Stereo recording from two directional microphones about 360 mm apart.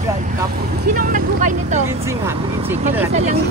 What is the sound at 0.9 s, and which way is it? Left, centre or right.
Speech, right.